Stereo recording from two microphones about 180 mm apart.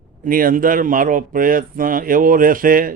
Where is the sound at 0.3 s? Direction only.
50° right (ahead or behind).